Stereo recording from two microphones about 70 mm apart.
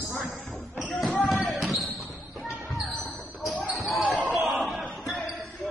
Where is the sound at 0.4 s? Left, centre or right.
Centre.